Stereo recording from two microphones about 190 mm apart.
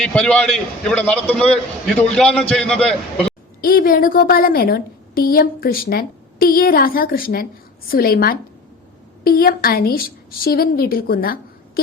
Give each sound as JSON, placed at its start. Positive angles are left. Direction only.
{"t": 0.0, "sound": "a man's voice", "side_deg": 5}
{"t": 3.6, "sound": "a woman's voice", "side_deg": 50}